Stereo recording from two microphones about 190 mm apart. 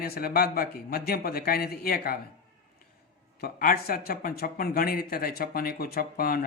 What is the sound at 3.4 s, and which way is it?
A man's voice, 50° left (ahead or behind).